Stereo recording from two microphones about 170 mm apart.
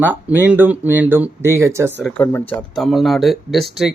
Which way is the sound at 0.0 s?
10° right (ahead or behind).